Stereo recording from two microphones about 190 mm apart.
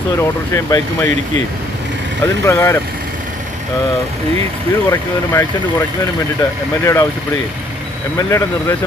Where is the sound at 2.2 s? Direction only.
15° left (ahead or behind).